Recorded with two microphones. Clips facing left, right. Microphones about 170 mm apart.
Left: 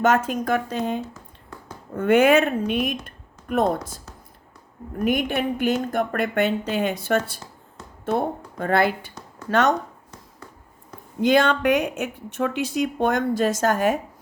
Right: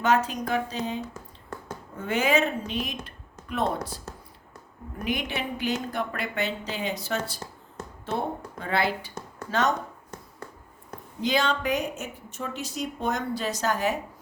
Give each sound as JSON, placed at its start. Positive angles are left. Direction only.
{"t": 0.0, "sound": "a woman's voice", "side_deg": 50}
{"t": 3.5, "sound": "a woman's voice", "side_deg": 45}
{"t": 5.0, "sound": "a woman's voice", "side_deg": 50}
{"t": 9.5, "sound": "speech", "side_deg": 65}
{"t": 11.2, "sound": "speech", "side_deg": 55}